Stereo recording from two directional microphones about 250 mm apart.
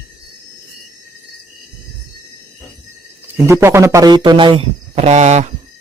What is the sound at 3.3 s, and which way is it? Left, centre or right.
A man's voice, centre.